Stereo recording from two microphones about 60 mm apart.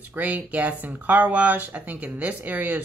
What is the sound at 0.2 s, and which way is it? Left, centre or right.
Speech, right.